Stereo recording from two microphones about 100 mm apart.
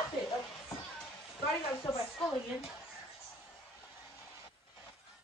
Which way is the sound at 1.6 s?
65° left (ahead or behind).